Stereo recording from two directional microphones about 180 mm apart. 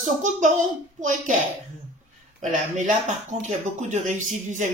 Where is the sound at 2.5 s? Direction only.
45° right (ahead or behind).